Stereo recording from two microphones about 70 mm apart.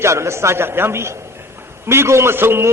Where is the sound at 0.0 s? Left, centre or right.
Right.